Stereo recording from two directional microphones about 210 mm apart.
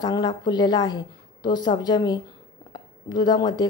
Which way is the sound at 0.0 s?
20° left (ahead or behind).